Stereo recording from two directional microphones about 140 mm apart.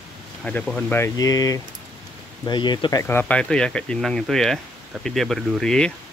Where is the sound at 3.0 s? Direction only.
15° left (ahead or behind).